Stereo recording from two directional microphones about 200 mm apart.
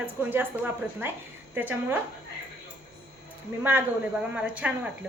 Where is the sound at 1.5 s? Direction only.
10° right (ahead or behind).